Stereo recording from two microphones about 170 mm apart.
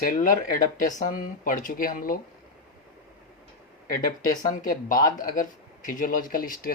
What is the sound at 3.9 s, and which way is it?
Speech, 55° left (ahead or behind).